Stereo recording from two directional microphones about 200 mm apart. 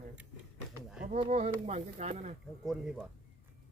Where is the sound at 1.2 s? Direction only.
35° right (ahead or behind).